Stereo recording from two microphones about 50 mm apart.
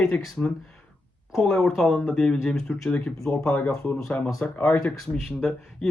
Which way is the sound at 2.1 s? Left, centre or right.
Centre.